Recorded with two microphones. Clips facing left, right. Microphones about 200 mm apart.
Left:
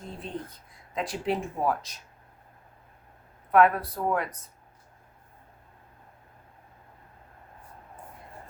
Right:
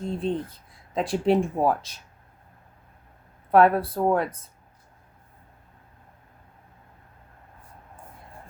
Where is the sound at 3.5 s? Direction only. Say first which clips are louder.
Right 3 dB; 30° right (ahead or behind).